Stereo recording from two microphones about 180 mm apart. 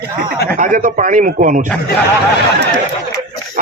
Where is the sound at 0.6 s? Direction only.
45° right (ahead or behind).